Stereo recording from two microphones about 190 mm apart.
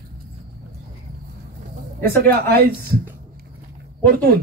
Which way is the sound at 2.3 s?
55° right (ahead or behind).